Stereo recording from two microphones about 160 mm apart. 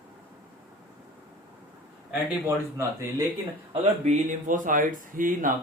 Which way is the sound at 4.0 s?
55° right (ahead or behind).